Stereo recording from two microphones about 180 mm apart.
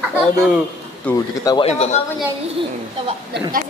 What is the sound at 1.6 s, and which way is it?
Speech, 35° left (ahead or behind).